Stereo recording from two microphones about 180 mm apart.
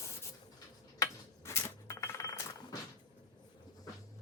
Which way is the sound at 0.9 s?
15° left (ahead or behind).